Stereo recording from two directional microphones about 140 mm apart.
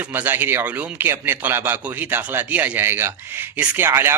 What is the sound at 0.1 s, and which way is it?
A man's voice, 15° right (ahead or behind).